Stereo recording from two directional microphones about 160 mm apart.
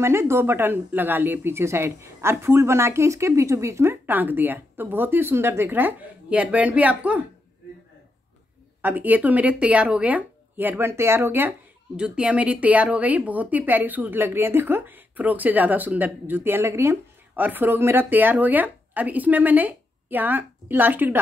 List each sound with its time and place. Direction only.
0.0 s a woman's voice: 15° right (ahead or behind)
8.8 s a woman's voice: 10° right (ahead or behind)